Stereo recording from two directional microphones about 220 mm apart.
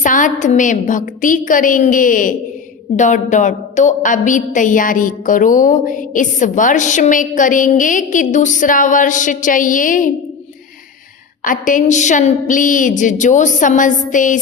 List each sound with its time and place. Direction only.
0.0 s a woman's voice: 35° left (ahead or behind)
11.4 s a woman's voice: 35° left (ahead or behind)